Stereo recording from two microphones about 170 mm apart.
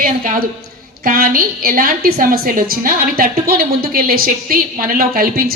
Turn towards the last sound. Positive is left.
turn(degrees=-60)  # may be behind; listen again after turning